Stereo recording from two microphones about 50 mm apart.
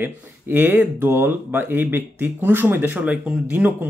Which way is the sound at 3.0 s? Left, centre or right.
Centre.